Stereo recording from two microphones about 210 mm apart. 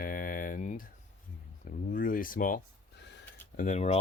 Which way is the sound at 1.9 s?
40° left (ahead or behind).